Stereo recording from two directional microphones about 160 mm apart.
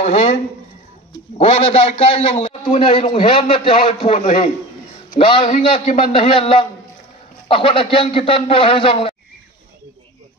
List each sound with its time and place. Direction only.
0.0 s speech: 40° left (ahead or behind)
1.4 s a man's voice: 40° left (ahead or behind)
5.2 s a man's voice: 35° left (ahead or behind)